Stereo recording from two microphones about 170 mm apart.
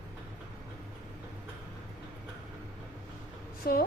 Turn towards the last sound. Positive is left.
turn(degrees=65)  # may be behind; listen again after turning